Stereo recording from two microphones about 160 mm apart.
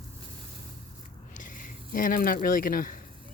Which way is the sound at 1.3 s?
55° left (ahead or behind).